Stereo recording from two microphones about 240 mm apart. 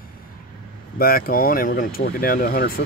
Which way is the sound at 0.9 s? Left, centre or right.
Left.